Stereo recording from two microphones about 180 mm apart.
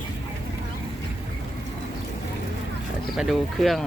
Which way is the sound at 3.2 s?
Centre (ahead or behind).